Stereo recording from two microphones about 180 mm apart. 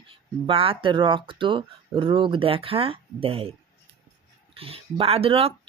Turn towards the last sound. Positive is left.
turn(degrees=-30)  # may be behind; listen again after turning